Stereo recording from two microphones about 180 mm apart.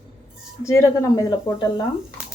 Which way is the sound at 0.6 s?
15° left (ahead or behind).